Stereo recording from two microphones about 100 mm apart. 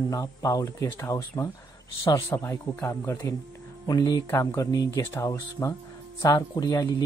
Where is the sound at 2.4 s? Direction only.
20° left (ahead or behind).